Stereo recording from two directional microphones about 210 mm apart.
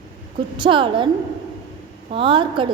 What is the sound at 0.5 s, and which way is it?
Speech, 25° right (ahead or behind).